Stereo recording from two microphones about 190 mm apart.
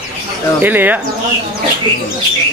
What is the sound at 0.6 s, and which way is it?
Speech, 10° right (ahead or behind).